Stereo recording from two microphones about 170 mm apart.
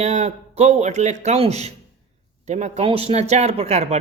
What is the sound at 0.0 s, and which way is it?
Speech, 40° right (ahead or behind).